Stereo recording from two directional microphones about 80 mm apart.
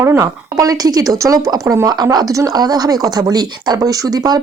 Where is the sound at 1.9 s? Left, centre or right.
Right.